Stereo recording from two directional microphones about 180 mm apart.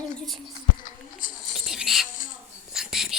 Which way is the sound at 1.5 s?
5° right (ahead or behind).